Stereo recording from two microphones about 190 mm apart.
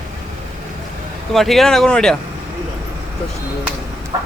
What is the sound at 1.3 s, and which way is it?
Speech, centre (ahead or behind).